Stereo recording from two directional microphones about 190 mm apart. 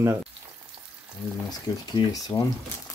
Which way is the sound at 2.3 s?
20° left (ahead or behind).